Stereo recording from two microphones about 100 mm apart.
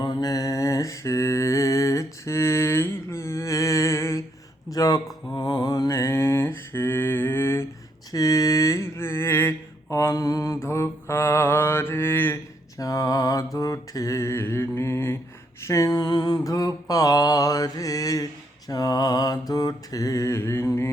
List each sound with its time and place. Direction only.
0.0 s mantra: 45° left (ahead or behind)
4.7 s a sound: 40° left (ahead or behind)
5.3 s mantra: 45° left (ahead or behind)
5.9 s mantra: 30° left (ahead or behind)
8.1 s mantra: 35° left (ahead or behind)
12.8 s mantra: 35° left (ahead or behind)